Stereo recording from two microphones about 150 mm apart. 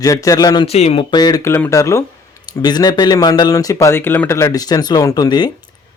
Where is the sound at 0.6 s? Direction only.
45° left (ahead or behind); by 5.5 s 30° left (ahead or behind).